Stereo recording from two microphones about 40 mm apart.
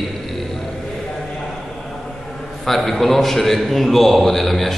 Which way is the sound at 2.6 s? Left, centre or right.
Centre.